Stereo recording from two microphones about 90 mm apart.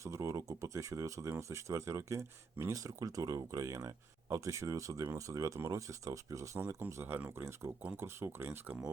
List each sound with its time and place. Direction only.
0.0 s speech: 35° right (ahead or behind)